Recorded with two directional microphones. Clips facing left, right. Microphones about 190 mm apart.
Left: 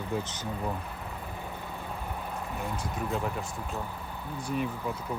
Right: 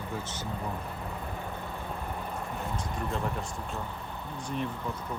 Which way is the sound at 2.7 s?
5° left (ahead or behind).